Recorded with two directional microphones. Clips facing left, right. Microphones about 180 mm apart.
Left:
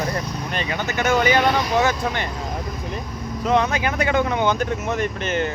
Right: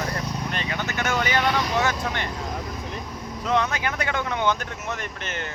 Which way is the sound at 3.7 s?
15° left (ahead or behind).